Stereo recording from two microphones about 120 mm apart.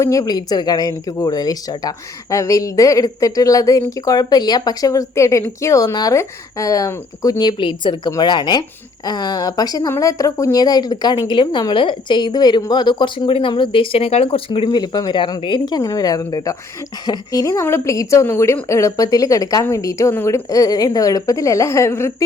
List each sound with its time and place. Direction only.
0.0 s a woman's voice: 25° left (ahead or behind)